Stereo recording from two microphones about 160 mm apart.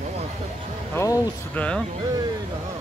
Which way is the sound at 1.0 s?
20° left (ahead or behind).